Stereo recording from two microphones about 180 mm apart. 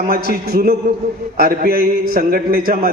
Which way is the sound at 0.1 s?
55° right (ahead or behind).